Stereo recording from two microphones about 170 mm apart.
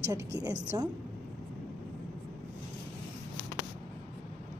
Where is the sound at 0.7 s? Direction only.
20° right (ahead or behind).